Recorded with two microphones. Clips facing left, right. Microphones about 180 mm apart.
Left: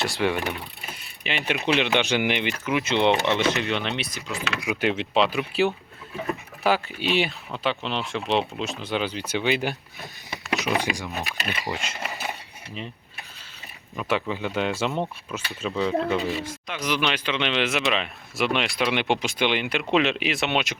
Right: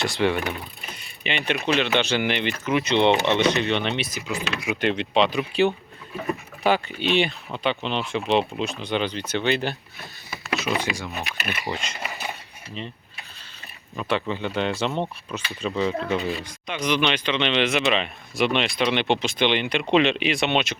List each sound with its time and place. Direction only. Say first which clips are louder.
0.2 s speech: right 2 dB; 10° left (ahead or behind)
0.9 s a sound: right 2 dB; 5° left (ahead or behind)
1.6 s speech: even; 15° left (ahead or behind)
10.2 s a sound: even; 15° left (ahead or behind)
10.8 s speech: left 1 dB; 15° left (ahead or behind)
13.9 s speech: right 1 dB; 5° left (ahead or behind)